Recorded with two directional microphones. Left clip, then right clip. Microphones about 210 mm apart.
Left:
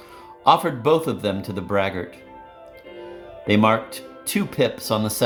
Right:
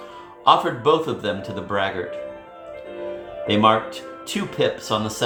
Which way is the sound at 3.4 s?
55° left (ahead or behind).